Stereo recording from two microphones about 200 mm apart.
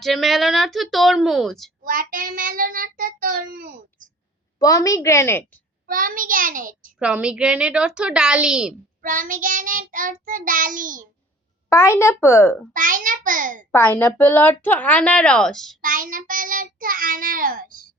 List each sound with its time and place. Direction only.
0.0 s a woman's voice: centre (ahead or behind)
1.8 s child singing: 45° right (ahead or behind)
4.6 s a woman's voice: 15° left (ahead or behind)
5.9 s child singing: 45° right (ahead or behind)
7.0 s a woman's voice: 5° right (ahead or behind)
9.0 s child singing: 45° right (ahead or behind)
11.7 s a woman's voice: 15° left (ahead or behind)
12.7 s child singing: 40° right (ahead or behind)
13.7 s a woman's voice: 10° left (ahead or behind)
15.8 s child singing: 40° right (ahead or behind)